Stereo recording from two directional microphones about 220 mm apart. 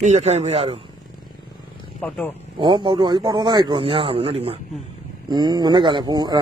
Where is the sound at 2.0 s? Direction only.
10° left (ahead or behind).